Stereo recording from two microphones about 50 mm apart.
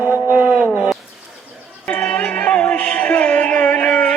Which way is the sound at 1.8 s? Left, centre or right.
Centre.